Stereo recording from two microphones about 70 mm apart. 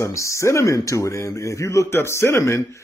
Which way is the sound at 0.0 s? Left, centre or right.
Left.